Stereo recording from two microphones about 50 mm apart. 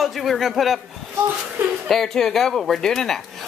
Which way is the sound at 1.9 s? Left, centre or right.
Centre.